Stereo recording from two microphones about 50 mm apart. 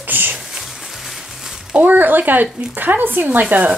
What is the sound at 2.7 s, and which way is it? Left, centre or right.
Speech, right.